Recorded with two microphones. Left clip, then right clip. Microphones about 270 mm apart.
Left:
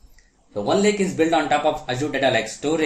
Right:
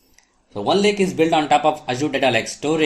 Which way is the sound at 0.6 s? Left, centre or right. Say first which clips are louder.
Right 2 dB; right.